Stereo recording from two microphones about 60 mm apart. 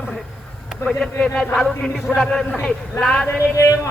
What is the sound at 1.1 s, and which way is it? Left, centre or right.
Speech, left.